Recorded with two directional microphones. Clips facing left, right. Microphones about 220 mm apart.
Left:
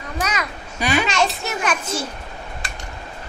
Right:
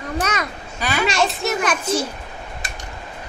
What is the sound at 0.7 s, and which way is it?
Babbling, 15° left (ahead or behind).